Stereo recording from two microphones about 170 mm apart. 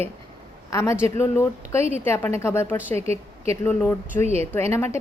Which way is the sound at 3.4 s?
15° left (ahead or behind).